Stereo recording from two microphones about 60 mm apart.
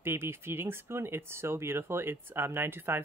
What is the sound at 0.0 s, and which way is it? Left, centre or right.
Speech, right.